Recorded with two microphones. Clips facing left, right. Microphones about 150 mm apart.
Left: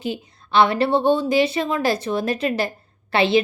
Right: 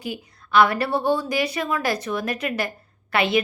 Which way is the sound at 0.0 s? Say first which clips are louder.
Left 4 dB; 25° left (ahead or behind).